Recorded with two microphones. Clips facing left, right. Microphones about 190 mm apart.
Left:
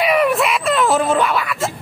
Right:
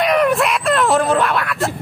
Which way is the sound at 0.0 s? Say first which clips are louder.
Right 1 dB; 5° left (ahead or behind).